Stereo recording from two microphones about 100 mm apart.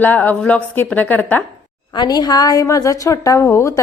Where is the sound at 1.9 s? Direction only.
45° left (ahead or behind); by 3.8 s 30° left (ahead or behind).